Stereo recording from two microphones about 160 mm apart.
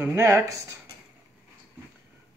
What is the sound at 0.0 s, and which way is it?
Speech, 15° right (ahead or behind).